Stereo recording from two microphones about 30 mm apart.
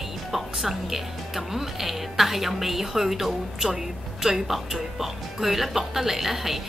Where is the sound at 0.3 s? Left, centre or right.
Centre.